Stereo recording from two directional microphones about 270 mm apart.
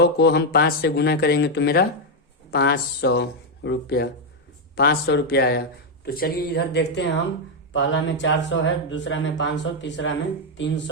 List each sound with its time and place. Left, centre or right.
0.0 s speech: left